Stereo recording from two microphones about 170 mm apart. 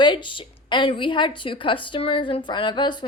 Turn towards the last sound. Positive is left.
turn(degrees=25)  # may be behind; listen again after turning